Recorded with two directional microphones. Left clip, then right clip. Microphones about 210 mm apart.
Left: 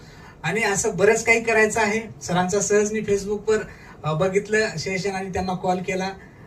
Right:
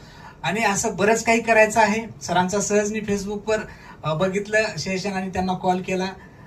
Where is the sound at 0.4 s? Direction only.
40° right (ahead or behind).